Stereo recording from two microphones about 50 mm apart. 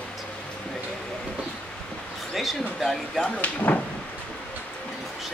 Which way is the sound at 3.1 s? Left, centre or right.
Left.